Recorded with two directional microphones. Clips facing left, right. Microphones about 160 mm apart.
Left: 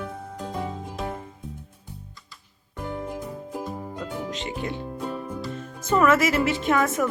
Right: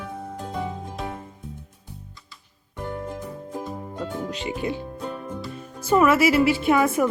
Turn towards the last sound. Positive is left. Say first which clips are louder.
# right 3 dB
turn(degrees=-10)  # may be behind; listen again after turning